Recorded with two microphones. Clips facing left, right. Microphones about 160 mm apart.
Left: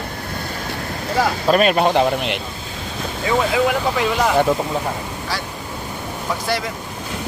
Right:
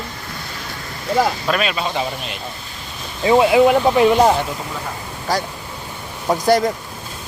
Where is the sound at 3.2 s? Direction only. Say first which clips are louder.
Right 6 dB; 25° right (ahead or behind).